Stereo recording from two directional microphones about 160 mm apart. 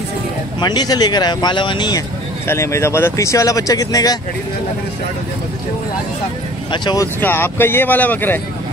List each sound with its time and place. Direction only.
0.6 s speech: 25° left (ahead or behind)
2.4 s speech: 15° left (ahead or behind)
6.7 s speech: 25° left (ahead or behind)
7.2 s speech: 15° left (ahead or behind)